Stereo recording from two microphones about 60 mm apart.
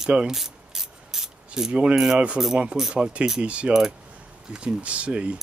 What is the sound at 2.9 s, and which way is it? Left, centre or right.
Speech, centre.